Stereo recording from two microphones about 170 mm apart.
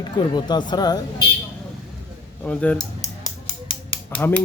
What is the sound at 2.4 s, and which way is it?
Speech, 5° left (ahead or behind).